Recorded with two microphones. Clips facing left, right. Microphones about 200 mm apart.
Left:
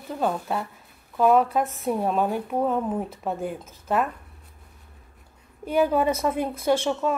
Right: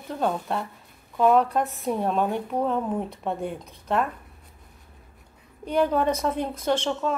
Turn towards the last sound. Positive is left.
turn(degrees=10)  # may be behind; listen again after turning